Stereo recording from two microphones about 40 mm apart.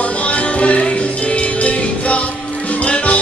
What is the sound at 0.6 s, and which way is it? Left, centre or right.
Music, left.